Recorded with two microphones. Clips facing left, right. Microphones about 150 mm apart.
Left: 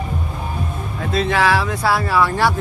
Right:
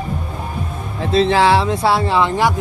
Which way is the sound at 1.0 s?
30° right (ahead or behind).